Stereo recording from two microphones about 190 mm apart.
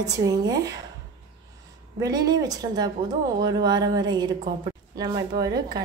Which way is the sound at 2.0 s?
20° right (ahead or behind).